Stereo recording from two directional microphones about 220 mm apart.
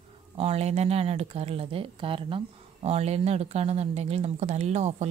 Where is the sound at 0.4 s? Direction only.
30° right (ahead or behind).